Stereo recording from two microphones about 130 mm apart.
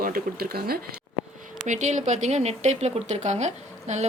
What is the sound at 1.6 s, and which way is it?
A woman's voice, 65° right (ahead or behind).